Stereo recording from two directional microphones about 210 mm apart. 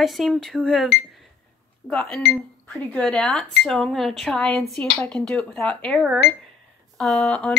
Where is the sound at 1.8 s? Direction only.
5° left (ahead or behind).